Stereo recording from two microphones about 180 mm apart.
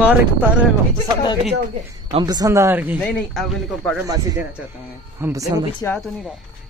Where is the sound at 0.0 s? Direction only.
10° right (ahead or behind).